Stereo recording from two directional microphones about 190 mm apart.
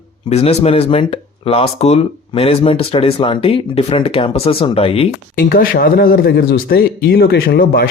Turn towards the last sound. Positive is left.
turn(degrees=55)  # may be behind; listen again after turning